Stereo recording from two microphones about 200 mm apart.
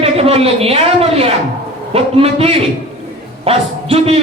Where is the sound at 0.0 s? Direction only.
30° right (ahead or behind).